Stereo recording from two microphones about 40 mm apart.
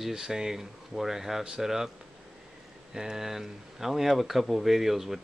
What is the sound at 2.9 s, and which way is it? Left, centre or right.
Speech, centre.